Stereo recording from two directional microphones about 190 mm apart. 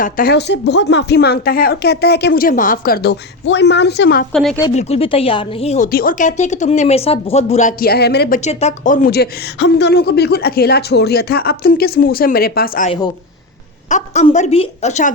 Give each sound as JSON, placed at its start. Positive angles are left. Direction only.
{"t": 0.0, "sound": "a woman's voice", "side_deg": 50}
{"t": 4.3, "sound": "speech", "side_deg": 0}
{"t": 4.7, "sound": "speech", "side_deg": 35}
{"t": 5.9, "sound": "speech", "side_deg": 50}
{"t": 7.8, "sound": "a woman's voice", "side_deg": 55}
{"t": 8.4, "sound": "a woman's voice", "side_deg": 40}
{"t": 13.9, "sound": "speech", "side_deg": 40}